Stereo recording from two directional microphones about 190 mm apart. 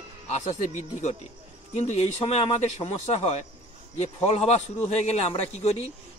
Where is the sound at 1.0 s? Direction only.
35° left (ahead or behind).